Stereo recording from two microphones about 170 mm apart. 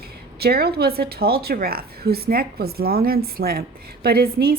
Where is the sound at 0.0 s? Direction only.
65° right (ahead or behind).